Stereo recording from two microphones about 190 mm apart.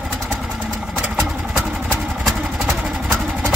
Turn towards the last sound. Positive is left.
turn(degrees=0)  # may be behind; listen again after turning